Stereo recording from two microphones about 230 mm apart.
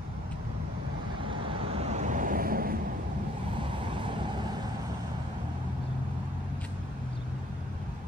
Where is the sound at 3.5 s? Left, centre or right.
Right.